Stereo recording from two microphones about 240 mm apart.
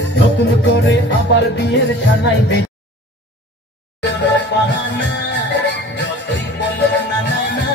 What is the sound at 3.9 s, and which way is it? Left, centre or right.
Music, left.